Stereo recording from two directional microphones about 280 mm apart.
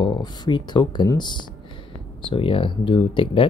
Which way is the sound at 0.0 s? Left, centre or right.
Centre.